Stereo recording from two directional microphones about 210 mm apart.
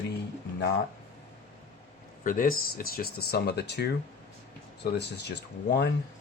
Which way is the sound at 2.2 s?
40° left (ahead or behind).